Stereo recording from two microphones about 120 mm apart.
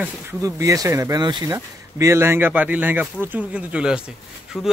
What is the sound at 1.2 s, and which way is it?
Speech, 35° right (ahead or behind).